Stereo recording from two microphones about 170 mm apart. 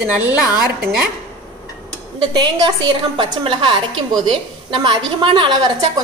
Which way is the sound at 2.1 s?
25° right (ahead or behind).